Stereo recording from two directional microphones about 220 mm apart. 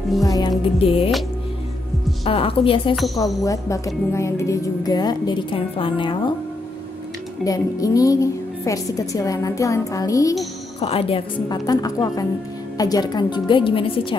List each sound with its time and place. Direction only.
0.2 s speech: 15° left (ahead or behind)
2.2 s speech: 25° left (ahead or behind)
7.4 s a woman's voice: 15° left (ahead or behind)
10.8 s a woman's voice: 25° left (ahead or behind)